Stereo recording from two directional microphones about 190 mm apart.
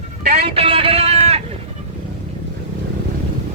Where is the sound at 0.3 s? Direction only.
30° right (ahead or behind).